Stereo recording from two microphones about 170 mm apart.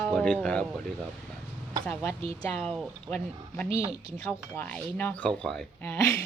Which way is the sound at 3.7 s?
35° right (ahead or behind).